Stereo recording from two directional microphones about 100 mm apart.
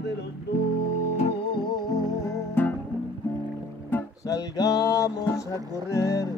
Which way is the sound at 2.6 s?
20° left (ahead or behind).